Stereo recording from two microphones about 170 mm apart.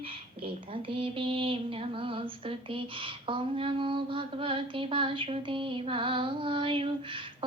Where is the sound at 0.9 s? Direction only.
30° right (ahead or behind).